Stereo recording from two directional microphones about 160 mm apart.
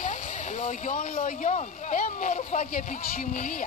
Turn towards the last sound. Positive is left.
turn(degrees=60)  # may be behind; listen again after turning